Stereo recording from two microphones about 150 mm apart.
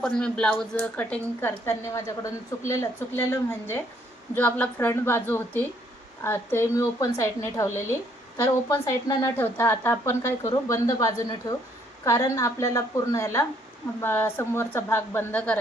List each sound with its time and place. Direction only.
0.0 s a woman's voice: 5° left (ahead or behind)